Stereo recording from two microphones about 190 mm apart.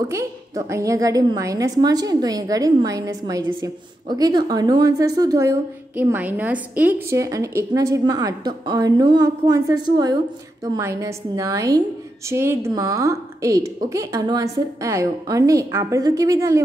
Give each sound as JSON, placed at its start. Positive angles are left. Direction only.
{"t": 0.1, "sound": "a woman's voice", "side_deg": -15}